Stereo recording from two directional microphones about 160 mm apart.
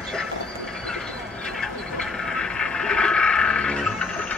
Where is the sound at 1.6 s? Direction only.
5° left (ahead or behind).